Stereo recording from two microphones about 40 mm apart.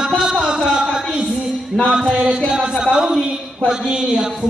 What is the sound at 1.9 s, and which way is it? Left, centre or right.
A woman's voice, centre.